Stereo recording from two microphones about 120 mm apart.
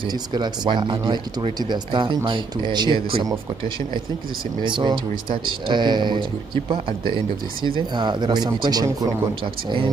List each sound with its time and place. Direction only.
0.0 s speech: 35° right (ahead or behind)
4.6 s speech: 40° right (ahead or behind)
9.4 s speech: 45° right (ahead or behind)